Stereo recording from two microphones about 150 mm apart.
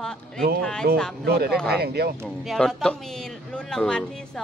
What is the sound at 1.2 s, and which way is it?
Speech, 90° right.